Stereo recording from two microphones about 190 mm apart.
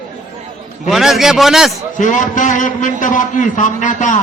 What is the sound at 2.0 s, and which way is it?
A man's voice, 40° left (ahead or behind).